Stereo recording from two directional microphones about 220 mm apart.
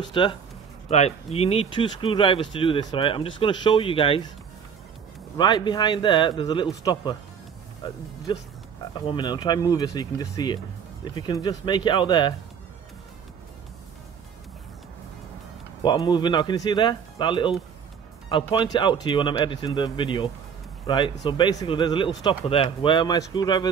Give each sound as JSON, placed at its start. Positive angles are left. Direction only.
{"t": 0.1, "sound": "speech", "side_deg": 25}
{"t": 5.4, "sound": "speech", "side_deg": 20}
{"t": 15.8, "sound": "speech", "side_deg": 20}